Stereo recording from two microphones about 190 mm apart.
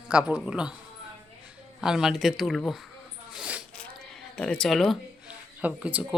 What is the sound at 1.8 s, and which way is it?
Speech, 5° right (ahead or behind).